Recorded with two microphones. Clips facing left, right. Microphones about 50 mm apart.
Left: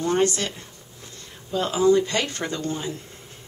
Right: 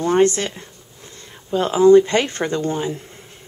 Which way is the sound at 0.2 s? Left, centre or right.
Right.